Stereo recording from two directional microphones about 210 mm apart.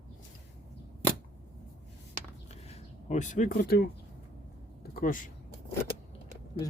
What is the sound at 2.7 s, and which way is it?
Speech, 30° left (ahead or behind).